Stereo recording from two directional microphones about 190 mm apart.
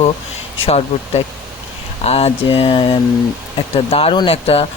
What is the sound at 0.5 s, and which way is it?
Speech, 30° left (ahead or behind).